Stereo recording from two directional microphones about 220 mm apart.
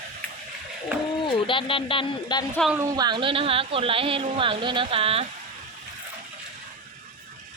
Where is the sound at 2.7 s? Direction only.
15° right (ahead or behind).